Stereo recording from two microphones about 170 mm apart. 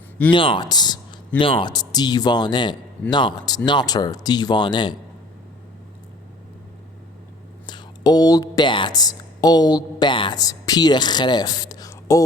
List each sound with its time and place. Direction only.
0.3 s speech: 30° left (ahead or behind)
7.7 s speech: 25° left (ahead or behind)